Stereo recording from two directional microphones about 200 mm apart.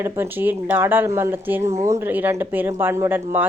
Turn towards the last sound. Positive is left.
turn(degrees=-10)  # may be behind; listen again after turning